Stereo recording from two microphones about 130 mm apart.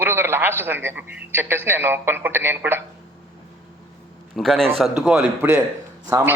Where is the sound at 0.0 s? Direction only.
15° right (ahead or behind).